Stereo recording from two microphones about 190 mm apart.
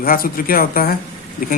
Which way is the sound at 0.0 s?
50° left (ahead or behind).